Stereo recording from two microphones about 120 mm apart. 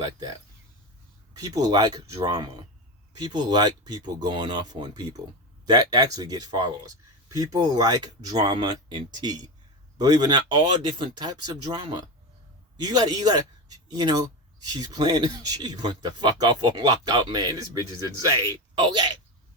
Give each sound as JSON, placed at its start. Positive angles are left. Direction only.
{"t": 1.3, "sound": "speech", "side_deg": -30}
{"t": 18.7, "sound": "speech", "side_deg": -40}